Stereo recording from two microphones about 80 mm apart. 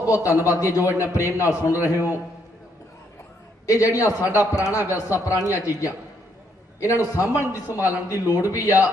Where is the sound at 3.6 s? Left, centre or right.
Left.